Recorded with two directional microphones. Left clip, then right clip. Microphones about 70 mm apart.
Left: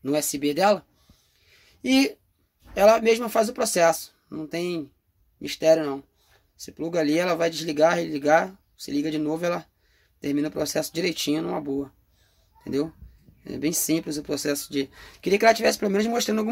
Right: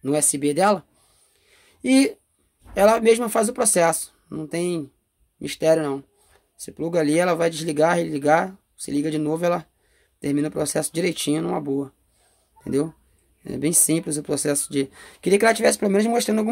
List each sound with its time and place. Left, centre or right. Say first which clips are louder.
0.2 s speech: right 2 dB; right
1.4 s a sound: right 3 dB; right
2.7 s speech: right 1 dB; right